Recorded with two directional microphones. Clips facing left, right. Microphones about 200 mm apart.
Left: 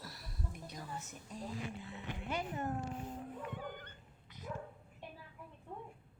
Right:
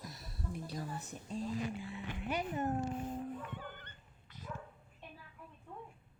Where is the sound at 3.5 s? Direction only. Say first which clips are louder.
Left 3 dB; 10° left (ahead or behind).